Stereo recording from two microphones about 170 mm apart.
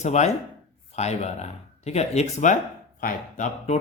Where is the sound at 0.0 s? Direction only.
40° left (ahead or behind).